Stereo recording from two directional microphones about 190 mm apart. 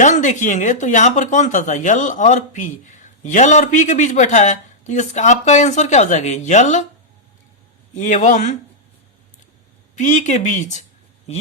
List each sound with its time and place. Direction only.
0.0 s speech: 40° left (ahead or behind)
7.9 s speech: 40° left (ahead or behind)
10.0 s speech: 40° left (ahead or behind)